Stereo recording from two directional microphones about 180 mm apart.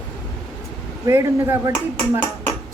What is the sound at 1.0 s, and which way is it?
Speech, 15° right (ahead or behind).